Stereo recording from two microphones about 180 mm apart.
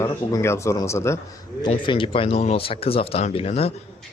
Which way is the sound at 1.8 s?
25° left (ahead or behind).